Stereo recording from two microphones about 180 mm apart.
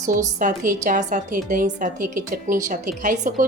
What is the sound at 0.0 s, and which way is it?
A woman's voice, 45° right (ahead or behind).